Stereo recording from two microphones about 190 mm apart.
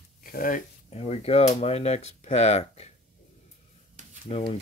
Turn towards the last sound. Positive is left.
turn(degrees=30)  # may be behind; listen again after turning